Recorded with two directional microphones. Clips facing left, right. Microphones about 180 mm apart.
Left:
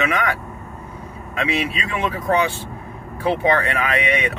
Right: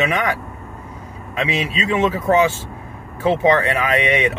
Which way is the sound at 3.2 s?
20° right (ahead or behind).